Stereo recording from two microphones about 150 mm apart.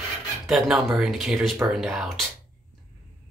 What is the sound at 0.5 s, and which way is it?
Speech, centre (ahead or behind).